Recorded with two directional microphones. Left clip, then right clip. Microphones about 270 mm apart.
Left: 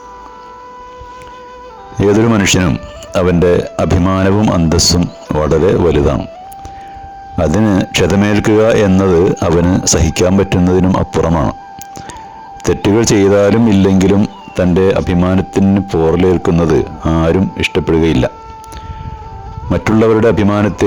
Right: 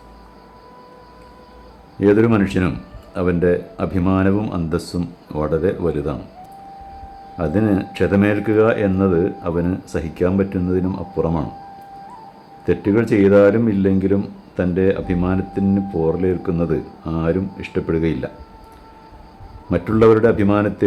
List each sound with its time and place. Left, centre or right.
2.0 s speech: left
7.3 s speech: left
12.7 s speech: left
19.7 s speech: left